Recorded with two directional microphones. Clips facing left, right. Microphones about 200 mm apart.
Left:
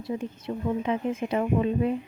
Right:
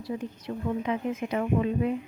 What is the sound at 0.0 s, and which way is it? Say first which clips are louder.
Speech: left 2 dB; 25° left (ahead or behind).